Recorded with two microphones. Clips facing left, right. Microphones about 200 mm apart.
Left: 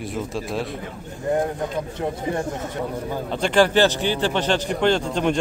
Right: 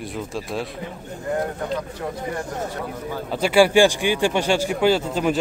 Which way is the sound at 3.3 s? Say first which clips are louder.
Right 2 dB; 10° right (ahead or behind).